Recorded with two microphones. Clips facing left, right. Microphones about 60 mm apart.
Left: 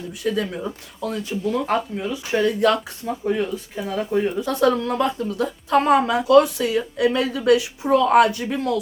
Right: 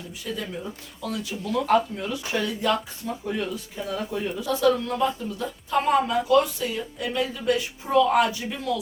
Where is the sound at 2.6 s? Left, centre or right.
Left.